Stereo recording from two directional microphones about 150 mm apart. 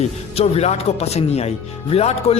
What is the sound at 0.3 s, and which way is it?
Speech, 45° left (ahead or behind).